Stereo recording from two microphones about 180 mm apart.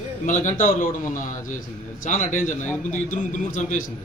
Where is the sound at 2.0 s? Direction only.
45° left (ahead or behind).